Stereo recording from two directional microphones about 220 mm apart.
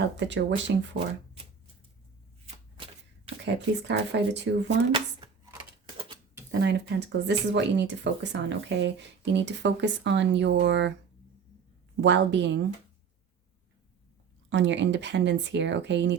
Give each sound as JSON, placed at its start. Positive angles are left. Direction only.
{"t": 0.2, "sound": "speech", "side_deg": -55}
{"t": 3.4, "sound": "speech", "side_deg": -50}
{"t": 4.9, "sound": "speech", "side_deg": -25}
{"t": 6.5, "sound": "speech", "side_deg": -50}
{"t": 11.9, "sound": "speech", "side_deg": -55}
{"t": 14.5, "sound": "speech", "side_deg": -55}